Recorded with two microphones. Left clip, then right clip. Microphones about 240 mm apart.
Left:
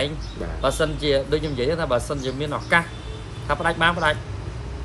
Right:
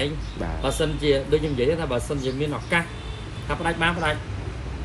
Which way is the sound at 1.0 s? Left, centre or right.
Left.